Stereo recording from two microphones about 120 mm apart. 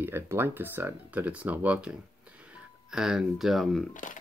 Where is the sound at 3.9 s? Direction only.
90° left.